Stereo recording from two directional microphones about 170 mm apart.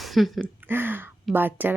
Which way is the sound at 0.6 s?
10° right (ahead or behind).